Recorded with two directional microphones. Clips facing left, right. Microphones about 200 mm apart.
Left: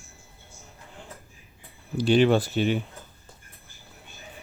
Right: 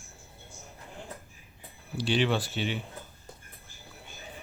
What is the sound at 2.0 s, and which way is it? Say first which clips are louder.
Speech: left 8 dB; 45° left (ahead or behind).